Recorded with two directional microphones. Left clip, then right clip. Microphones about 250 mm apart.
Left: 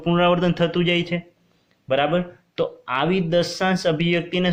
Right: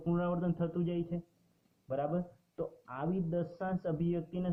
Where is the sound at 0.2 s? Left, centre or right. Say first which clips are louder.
Left 17 dB; left.